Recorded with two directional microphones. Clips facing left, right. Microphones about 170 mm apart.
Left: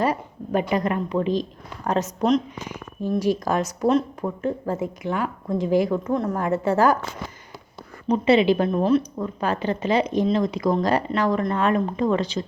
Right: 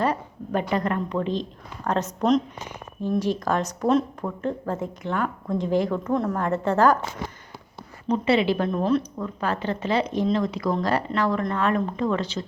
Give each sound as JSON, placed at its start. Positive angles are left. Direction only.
{"t": 0.0, "sound": "speech", "side_deg": 10}
{"t": 8.0, "sound": "speech", "side_deg": 15}